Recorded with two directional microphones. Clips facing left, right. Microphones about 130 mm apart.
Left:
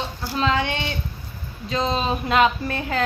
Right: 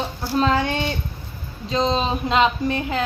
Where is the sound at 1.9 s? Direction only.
25° right (ahead or behind).